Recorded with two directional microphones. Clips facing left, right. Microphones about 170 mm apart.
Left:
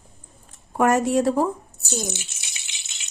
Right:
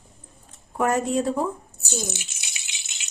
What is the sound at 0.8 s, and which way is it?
Speech, 75° left (ahead or behind).